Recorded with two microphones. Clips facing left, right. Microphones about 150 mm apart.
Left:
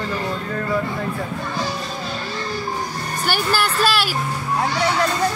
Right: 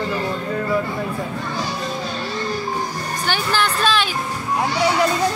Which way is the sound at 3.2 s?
10° left (ahead or behind).